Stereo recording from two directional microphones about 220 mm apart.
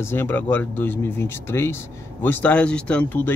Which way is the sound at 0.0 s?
10° left (ahead or behind).